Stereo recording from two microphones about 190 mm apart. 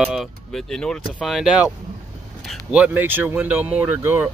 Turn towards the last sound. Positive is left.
turn(degrees=-10)  # may be behind; listen again after turning